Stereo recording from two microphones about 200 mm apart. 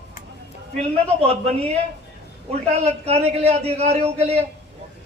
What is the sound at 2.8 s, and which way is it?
Speech, 30° right (ahead or behind).